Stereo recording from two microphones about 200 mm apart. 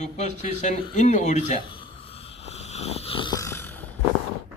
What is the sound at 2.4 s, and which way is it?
Snoring, 30° left (ahead or behind).